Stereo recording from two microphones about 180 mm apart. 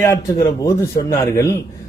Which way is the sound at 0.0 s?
15° left (ahead or behind).